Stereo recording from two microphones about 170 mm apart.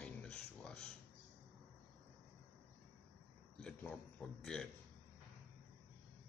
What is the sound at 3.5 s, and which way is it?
A man's voice, 5° left (ahead or behind).